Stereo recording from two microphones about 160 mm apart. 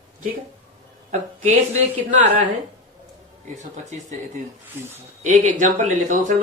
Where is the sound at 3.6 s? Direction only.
50° right (ahead or behind).